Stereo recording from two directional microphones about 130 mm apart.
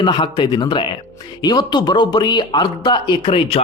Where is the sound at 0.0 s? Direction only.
35° left (ahead or behind).